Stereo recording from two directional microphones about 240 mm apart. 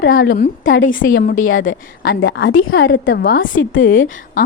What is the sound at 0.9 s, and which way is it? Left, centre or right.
A woman's voice, left.